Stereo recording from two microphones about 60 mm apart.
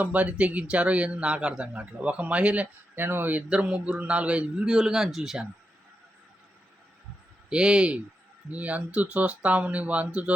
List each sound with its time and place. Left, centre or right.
0.0 s a man's voice: right
2.9 s speech: right
3.5 s a man's voice: centre
7.5 s a man's voice: centre